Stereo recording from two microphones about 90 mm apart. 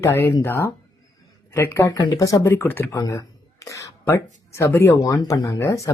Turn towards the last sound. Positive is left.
turn(degrees=35)  # may be behind; listen again after turning